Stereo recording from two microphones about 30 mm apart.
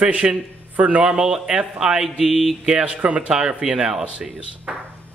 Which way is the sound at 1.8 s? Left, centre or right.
Centre.